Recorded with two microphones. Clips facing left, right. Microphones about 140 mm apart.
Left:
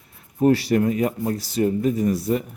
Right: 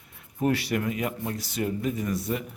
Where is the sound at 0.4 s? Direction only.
35° left (ahead or behind).